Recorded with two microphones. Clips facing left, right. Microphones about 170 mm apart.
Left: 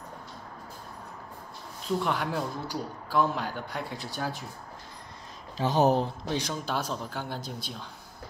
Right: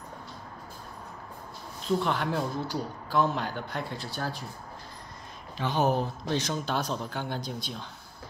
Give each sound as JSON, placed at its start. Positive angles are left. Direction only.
{"t": 2.0, "sound": "speech", "side_deg": 10}
{"t": 5.6, "sound": "speech", "side_deg": 35}
{"t": 6.2, "sound": "speech", "side_deg": 10}